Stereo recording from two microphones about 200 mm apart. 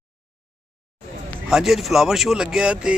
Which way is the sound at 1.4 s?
Centre (ahead or behind).